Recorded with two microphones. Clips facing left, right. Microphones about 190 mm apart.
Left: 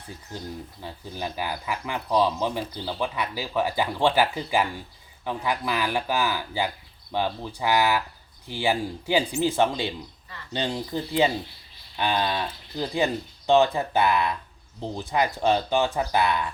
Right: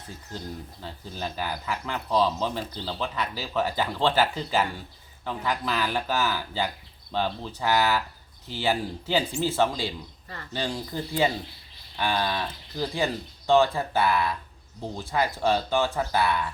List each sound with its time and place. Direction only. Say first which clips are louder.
0.3 s speech: left 1 dB; 15° left (ahead or behind)